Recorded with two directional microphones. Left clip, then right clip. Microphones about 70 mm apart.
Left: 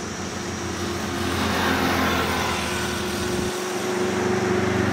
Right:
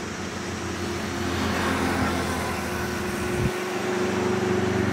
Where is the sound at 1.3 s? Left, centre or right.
Left.